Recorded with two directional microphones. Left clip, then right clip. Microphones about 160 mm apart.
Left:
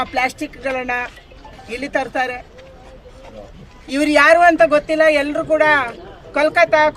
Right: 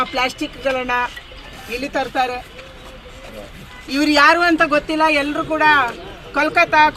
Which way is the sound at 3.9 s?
20° left (ahead or behind).